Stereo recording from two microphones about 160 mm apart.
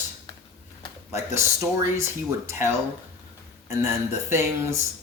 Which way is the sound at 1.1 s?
15° right (ahead or behind).